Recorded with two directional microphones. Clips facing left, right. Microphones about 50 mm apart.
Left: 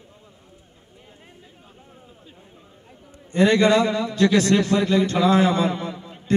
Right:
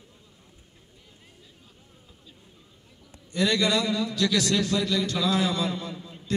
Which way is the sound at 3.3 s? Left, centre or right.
Left.